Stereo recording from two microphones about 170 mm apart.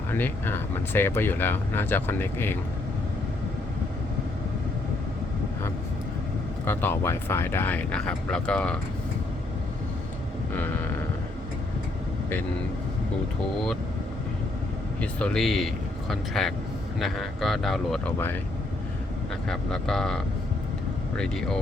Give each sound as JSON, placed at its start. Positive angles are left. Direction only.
{"t": 0.1, "sound": "speech", "side_deg": 10}
{"t": 6.7, "sound": "speech", "side_deg": 15}
{"t": 15.0, "sound": "speech", "side_deg": 5}
{"t": 19.5, "sound": "speech", "side_deg": 5}